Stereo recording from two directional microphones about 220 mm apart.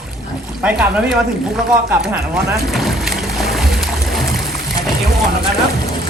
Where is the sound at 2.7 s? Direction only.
Centre (ahead or behind).